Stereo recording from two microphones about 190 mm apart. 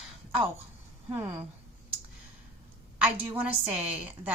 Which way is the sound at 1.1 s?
10° right (ahead or behind).